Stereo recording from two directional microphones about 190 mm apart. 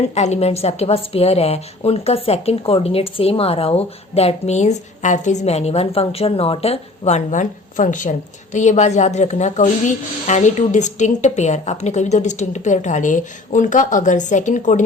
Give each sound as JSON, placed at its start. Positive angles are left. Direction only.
{"t": 0.0, "sound": "a woman's voice", "side_deg": 35}